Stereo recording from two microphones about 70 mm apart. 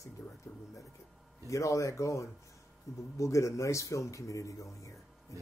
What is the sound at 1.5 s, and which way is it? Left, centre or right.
Speech, left.